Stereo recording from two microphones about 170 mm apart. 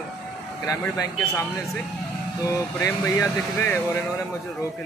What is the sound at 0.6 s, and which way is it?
Speech, 20° left (ahead or behind).